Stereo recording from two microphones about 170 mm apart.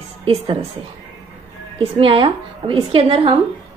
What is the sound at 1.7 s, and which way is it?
A woman's voice, 30° right (ahead or behind).